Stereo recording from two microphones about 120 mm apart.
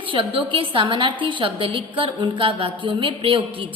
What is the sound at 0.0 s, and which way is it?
A woman's voice, 45° right (ahead or behind).